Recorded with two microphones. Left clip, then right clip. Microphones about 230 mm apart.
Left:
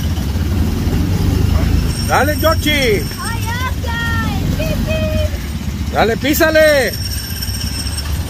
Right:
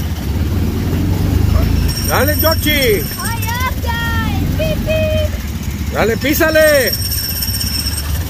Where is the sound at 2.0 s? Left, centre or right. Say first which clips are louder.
Left 1 dB; centre.